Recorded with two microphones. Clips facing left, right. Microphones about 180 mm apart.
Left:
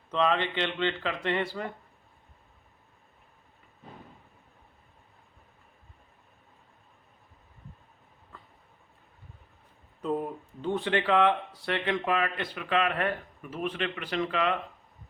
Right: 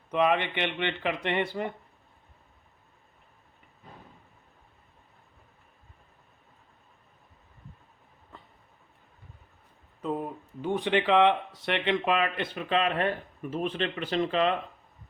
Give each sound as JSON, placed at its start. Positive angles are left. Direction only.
{"t": 0.1, "sound": "speech", "side_deg": -15}
{"t": 10.0, "sound": "a sound", "side_deg": 0}
{"t": 10.6, "sound": "speech", "side_deg": -15}